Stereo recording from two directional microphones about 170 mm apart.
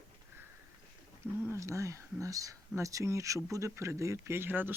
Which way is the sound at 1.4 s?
15° right (ahead or behind).